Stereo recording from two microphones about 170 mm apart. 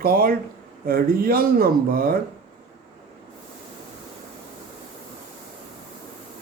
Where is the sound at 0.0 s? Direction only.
60° right (ahead or behind).